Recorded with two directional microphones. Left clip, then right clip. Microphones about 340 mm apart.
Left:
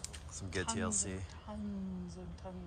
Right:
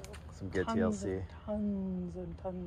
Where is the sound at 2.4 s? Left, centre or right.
Centre.